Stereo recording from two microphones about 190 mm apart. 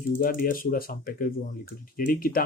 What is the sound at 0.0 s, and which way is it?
Speech, 45° left (ahead or behind).